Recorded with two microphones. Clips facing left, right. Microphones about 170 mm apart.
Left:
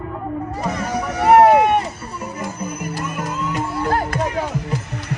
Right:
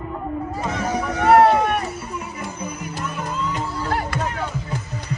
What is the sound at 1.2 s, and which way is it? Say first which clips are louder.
Vehicle: left 3 dB; 15° left (ahead or behind).